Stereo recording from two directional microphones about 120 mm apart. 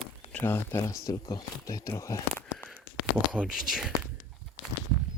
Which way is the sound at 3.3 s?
5° right (ahead or behind).